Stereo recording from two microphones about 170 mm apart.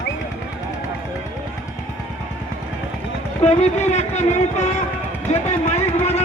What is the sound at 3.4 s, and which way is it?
Speech, 40° left (ahead or behind).